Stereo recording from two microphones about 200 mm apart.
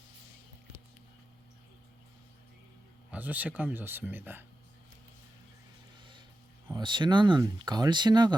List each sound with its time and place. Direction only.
3.1 s speech: 10° right (ahead or behind)
6.0 s a sound: 25° right (ahead or behind)
6.7 s speech: 20° right (ahead or behind)